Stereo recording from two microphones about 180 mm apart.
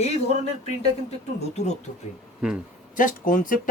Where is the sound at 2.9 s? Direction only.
45° left (ahead or behind).